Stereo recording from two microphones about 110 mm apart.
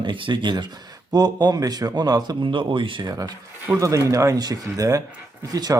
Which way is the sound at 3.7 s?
30° right (ahead or behind).